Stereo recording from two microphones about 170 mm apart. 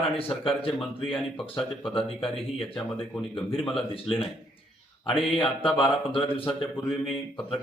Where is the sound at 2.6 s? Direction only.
30° left (ahead or behind).